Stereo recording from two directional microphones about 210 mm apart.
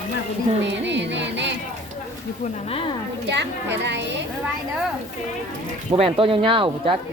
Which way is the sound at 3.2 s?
55° right (ahead or behind).